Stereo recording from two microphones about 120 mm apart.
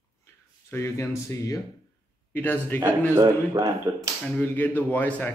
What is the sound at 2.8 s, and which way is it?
Speech, 20° right (ahead or behind).